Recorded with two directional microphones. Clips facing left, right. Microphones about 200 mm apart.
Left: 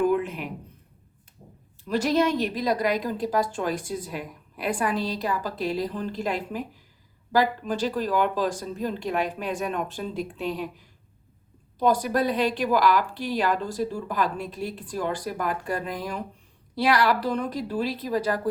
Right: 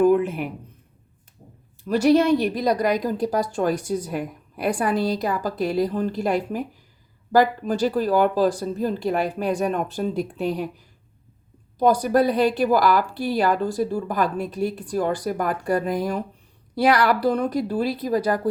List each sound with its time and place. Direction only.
0.0 s a sound: 45° right (ahead or behind)
1.9 s a woman's voice: 45° right (ahead or behind)
11.8 s a woman's voice: 45° right (ahead or behind)